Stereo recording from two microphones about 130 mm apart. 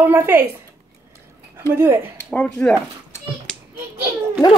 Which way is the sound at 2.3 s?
10° left (ahead or behind).